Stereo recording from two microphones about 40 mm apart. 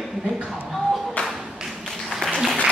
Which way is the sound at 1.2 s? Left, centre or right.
Left.